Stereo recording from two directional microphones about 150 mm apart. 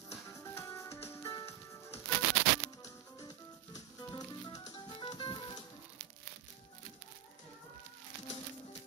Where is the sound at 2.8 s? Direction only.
25° left (ahead or behind).